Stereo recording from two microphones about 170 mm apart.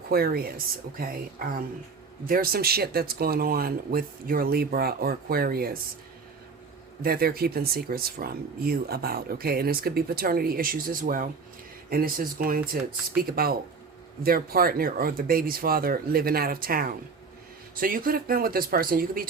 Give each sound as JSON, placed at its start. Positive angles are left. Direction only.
{"t": 0.1, "sound": "speech", "side_deg": -60}
{"t": 7.0, "sound": "speech", "side_deg": -60}